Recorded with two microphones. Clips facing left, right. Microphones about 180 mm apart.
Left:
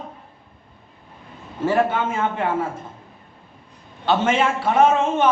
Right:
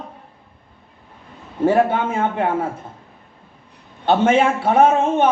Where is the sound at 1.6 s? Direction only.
55° right (ahead or behind).